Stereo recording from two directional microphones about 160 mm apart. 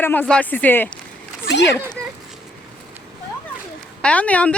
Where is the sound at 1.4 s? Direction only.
90° left.